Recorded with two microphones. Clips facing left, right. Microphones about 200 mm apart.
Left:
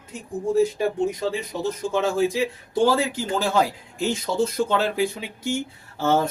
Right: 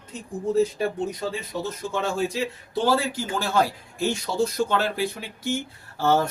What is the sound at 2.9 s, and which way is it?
Speech, 15° left (ahead or behind).